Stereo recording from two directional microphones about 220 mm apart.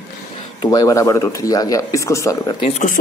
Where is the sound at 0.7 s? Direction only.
15° left (ahead or behind).